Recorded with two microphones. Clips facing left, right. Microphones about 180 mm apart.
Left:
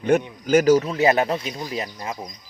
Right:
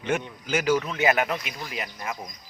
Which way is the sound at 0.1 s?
40° left (ahead or behind).